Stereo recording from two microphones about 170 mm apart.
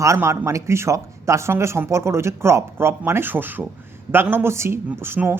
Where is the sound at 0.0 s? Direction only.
15° right (ahead or behind).